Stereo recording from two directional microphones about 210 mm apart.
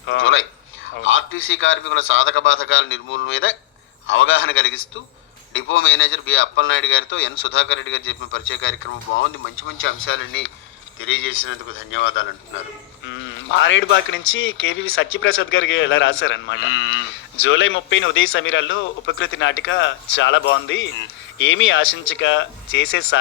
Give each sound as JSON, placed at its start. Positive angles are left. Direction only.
{"t": 0.1, "sound": "a man's voice", "side_deg": 70}